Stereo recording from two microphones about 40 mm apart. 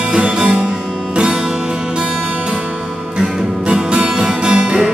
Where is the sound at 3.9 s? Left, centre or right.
Right.